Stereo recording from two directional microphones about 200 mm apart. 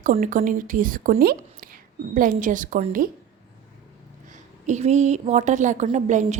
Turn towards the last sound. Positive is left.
turn(degrees=-35)  # may be behind; listen again after turning